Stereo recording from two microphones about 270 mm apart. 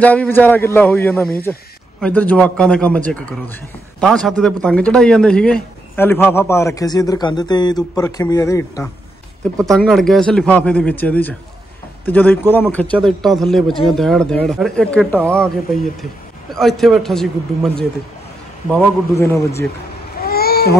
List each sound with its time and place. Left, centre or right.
0.0 s a man's voice: centre
9.7 s a man's voice: centre
16.5 s a man's voice: centre
18.7 s a man's voice: centre
20.2 s babbling: left